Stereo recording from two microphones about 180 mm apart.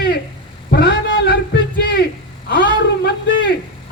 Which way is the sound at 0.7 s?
65° left (ahead or behind).